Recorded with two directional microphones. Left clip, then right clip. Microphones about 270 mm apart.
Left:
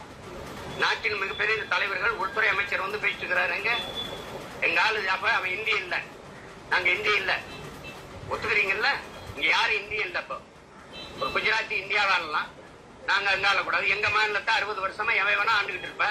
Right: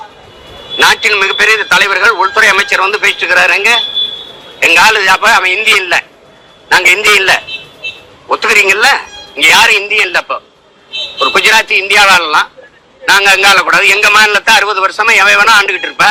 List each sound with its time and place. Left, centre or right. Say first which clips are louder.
0.8 s a man's voice: right 19 dB; right